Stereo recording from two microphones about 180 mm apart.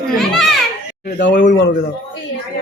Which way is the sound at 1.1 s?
75° left (ahead or behind).